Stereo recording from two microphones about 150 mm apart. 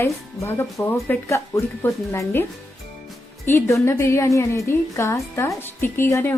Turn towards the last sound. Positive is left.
turn(degrees=15)  # may be behind; listen again after turning